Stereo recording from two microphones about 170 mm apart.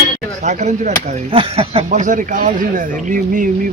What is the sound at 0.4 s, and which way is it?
Speech, 45° right (ahead or behind).